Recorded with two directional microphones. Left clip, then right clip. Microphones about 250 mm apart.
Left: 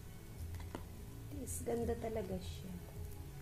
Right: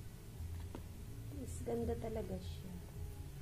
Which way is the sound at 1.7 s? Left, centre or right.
Centre.